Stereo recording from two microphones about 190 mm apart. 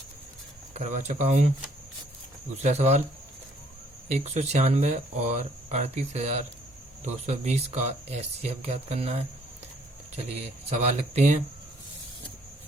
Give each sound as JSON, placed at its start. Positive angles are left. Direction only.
{"t": 0.7, "sound": "speech", "side_deg": -40}
{"t": 2.6, "sound": "speech", "side_deg": -35}
{"t": 4.1, "sound": "speech", "side_deg": -35}
{"t": 10.8, "sound": "speech", "side_deg": -35}